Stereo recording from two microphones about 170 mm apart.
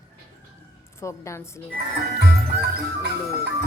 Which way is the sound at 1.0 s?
15° left (ahead or behind).